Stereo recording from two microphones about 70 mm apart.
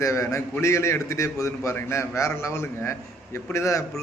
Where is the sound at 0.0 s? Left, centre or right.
Left.